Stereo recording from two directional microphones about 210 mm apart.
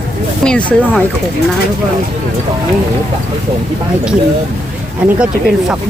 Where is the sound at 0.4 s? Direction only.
5° left (ahead or behind).